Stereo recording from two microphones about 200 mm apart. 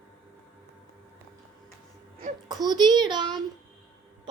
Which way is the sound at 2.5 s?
20° right (ahead or behind).